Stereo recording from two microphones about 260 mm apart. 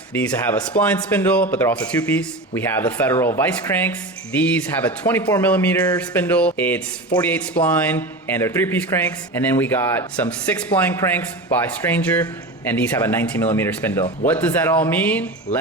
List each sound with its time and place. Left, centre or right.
0.1 s speech: centre